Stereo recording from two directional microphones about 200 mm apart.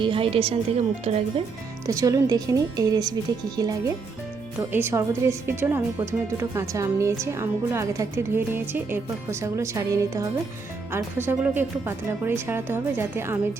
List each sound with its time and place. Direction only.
0.0 s a woman's voice: 25° right (ahead or behind)
1.9 s a woman's voice: 15° right (ahead or behind)